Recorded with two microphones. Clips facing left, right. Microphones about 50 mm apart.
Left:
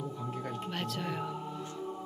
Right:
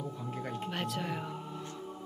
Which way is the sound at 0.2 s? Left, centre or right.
Centre.